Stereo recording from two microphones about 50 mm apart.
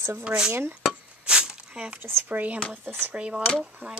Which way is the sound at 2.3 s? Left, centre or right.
Right.